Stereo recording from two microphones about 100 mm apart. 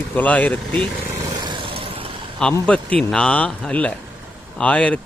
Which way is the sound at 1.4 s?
55° right (ahead or behind).